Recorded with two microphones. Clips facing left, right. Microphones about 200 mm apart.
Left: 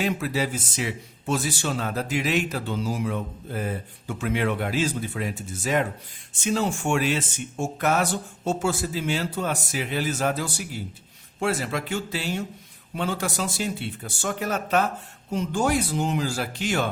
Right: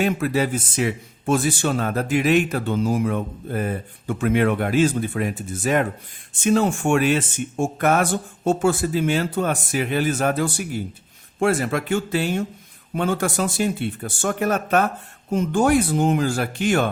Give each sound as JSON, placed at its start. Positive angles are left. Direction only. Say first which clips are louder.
{"t": 0.0, "sound": "speech", "louder": "right 5 dB", "side_deg": -55}